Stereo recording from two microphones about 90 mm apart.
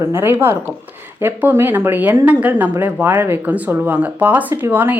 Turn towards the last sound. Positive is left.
turn(degrees=-20)  # may be behind; listen again after turning